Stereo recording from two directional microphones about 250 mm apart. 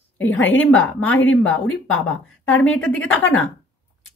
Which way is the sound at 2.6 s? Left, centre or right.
Centre.